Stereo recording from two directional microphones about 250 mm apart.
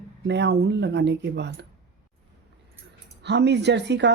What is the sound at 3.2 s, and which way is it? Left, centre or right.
Speech, right.